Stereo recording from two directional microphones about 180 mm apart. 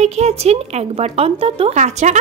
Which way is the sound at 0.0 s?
35° right (ahead or behind).